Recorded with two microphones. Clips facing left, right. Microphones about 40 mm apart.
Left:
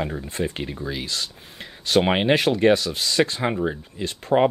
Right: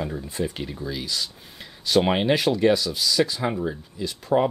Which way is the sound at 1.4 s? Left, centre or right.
Left.